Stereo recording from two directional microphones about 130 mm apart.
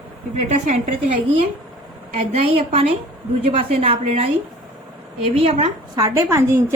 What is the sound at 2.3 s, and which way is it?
A woman's voice, 50° right (ahead or behind).